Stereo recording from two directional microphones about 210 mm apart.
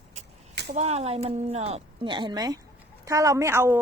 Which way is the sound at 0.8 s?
30° right (ahead or behind).